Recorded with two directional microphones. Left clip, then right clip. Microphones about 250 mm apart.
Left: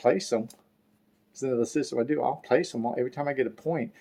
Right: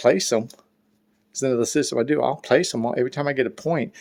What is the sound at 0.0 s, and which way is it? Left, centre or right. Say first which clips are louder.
Speech: right 6 dB; right.